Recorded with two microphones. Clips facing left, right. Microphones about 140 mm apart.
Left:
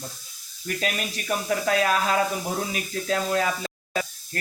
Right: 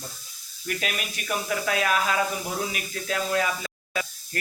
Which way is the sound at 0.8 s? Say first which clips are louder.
Left 3 dB; 35° left (ahead or behind).